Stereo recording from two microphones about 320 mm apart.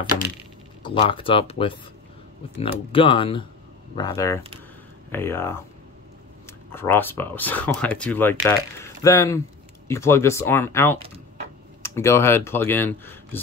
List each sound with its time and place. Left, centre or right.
0.8 s speech: centre